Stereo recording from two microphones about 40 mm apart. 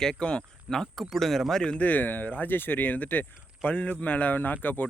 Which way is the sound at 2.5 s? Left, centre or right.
Left.